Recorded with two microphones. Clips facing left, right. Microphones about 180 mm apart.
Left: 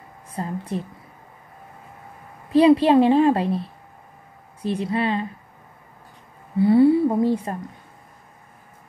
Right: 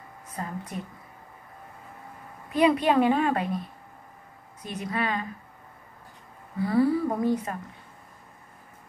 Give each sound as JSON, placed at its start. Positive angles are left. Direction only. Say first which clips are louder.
{"t": 0.3, "sound": "a woman's voice", "louder": "left 7 dB", "side_deg": 30}
{"t": 2.5, "sound": "a woman's voice", "louder": "left 7 dB", "side_deg": 30}
{"t": 6.6, "sound": "a woman's voice", "louder": "left 8 dB", "side_deg": 25}